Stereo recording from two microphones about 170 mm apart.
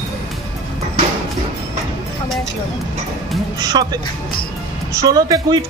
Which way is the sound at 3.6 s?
25° right (ahead or behind).